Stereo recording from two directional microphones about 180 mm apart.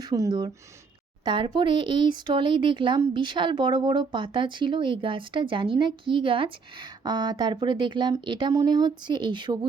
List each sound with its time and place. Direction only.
0.0 s a woman's voice: 20° right (ahead or behind)